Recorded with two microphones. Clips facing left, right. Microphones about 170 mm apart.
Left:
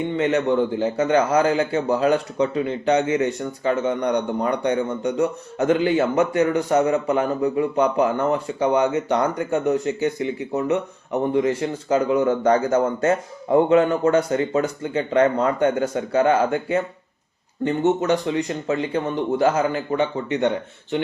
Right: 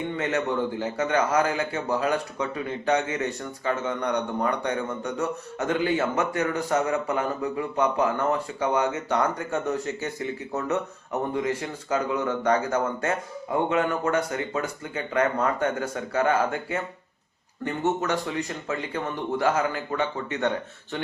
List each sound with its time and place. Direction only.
0.2 s a man's voice: 25° left (ahead or behind)
12.2 s a man's voice: 40° left (ahead or behind)
13.7 s a man's voice: 30° left (ahead or behind)